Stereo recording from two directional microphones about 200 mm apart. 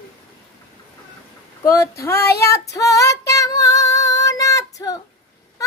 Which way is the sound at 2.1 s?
55° left (ahead or behind).